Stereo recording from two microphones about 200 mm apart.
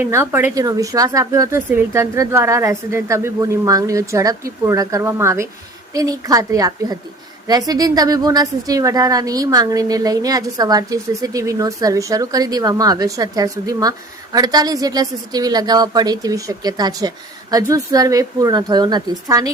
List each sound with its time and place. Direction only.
0.0 s a woman's voice: 10° right (ahead or behind)